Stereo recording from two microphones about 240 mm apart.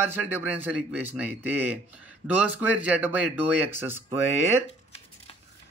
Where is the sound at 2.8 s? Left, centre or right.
Centre.